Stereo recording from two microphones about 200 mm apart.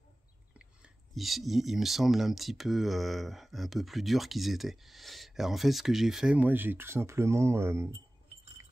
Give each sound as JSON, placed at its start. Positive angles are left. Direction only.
{"t": 0.6, "sound": "speech", "side_deg": 0}